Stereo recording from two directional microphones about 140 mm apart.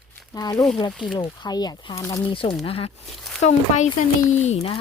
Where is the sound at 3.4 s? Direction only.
55° left (ahead or behind).